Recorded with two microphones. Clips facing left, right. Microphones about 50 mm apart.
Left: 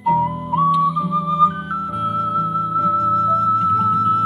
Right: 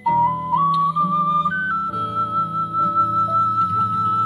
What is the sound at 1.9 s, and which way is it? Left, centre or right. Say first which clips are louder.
Music: left 2 dB; left.